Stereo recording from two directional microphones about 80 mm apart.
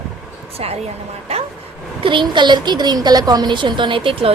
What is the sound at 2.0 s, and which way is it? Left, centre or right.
Speech, right.